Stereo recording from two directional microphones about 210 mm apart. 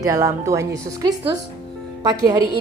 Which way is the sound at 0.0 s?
15° right (ahead or behind).